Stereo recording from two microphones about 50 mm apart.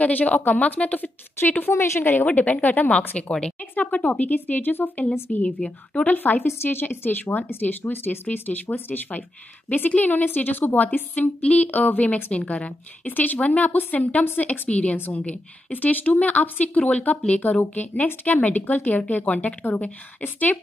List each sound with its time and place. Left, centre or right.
0.0 s a woman's voice: left
1.7 s a woman's voice: left
2.0 s speech: left
2.2 s a woman's voice: left
3.2 s a woman's voice: centre
3.7 s speech: left
4.3 s a woman's voice: left
5.3 s speech: left
6.0 s a woman's voice: left
6.4 s a woman's voice: left
14.7 s speech: left
15.0 s a woman's voice: left